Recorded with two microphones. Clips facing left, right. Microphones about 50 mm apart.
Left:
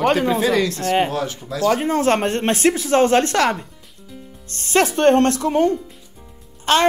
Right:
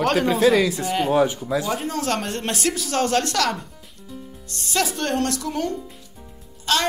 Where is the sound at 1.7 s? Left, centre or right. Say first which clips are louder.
Left 7 dB; left.